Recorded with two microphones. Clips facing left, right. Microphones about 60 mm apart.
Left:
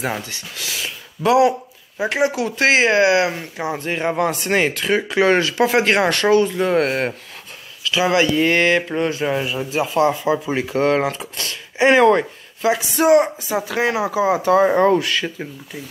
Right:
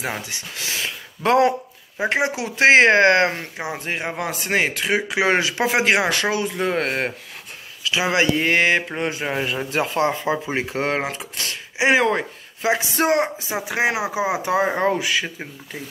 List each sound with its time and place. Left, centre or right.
0.2 s speech: right
0.7 s a sound: right
2.0 s speech: right
2.7 s speech: right
3.5 s speech: centre
7.8 s speech: right
9.6 s speech: right
9.9 s speech: right
11.8 s speech: centre
12.6 s speech: right